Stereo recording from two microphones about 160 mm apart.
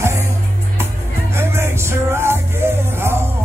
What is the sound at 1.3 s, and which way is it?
Music, 15° right (ahead or behind).